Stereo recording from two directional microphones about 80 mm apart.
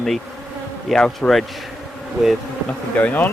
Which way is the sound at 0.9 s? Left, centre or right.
Centre.